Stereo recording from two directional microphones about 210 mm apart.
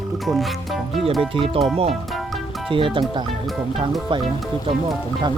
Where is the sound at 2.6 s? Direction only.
25° right (ahead or behind).